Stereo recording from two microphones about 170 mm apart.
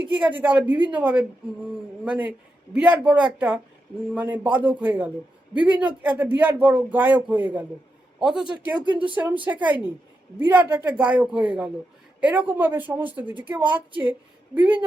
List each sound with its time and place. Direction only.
0.0 s a man's voice: 10° right (ahead or behind)
8.9 s speech: 30° right (ahead or behind)
9.1 s speech: 10° right (ahead or behind)